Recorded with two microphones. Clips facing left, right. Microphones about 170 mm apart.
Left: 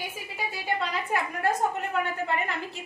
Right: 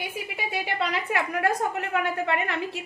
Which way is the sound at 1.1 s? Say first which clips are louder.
Right 1 dB; 80° right.